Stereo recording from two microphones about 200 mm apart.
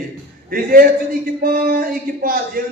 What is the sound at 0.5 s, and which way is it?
A man's voice, 45° right (ahead or behind).